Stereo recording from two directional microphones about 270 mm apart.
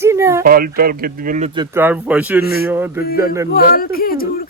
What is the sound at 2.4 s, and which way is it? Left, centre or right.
Speech, left.